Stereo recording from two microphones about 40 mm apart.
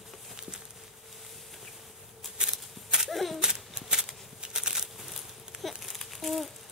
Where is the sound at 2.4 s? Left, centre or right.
Right.